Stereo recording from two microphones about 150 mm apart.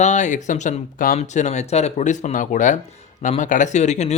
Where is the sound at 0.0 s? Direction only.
50° left (ahead or behind).